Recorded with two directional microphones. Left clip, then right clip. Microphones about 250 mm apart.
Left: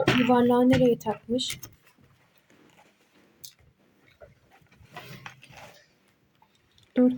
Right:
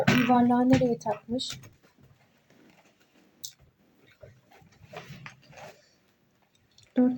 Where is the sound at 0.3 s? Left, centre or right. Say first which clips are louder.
Left 4 dB; left.